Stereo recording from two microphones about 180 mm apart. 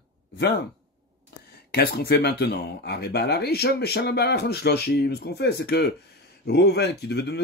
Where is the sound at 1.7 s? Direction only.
60° left (ahead or behind).